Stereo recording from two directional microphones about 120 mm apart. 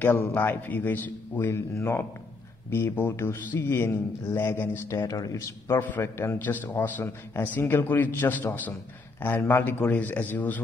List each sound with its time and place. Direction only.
0.0 s a man's voice: 20° left (ahead or behind)